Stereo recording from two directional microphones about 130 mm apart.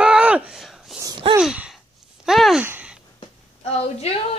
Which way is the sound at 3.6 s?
50° left (ahead or behind).